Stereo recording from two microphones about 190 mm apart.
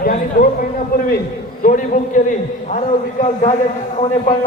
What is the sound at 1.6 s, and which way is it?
A man's voice, 45° left (ahead or behind).